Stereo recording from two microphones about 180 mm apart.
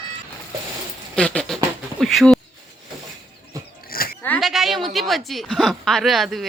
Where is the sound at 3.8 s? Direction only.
55° left (ahead or behind).